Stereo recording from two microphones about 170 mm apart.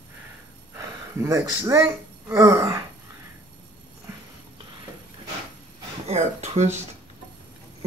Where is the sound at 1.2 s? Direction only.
15° right (ahead or behind).